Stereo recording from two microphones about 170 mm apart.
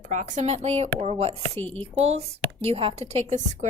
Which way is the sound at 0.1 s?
45° right (ahead or behind).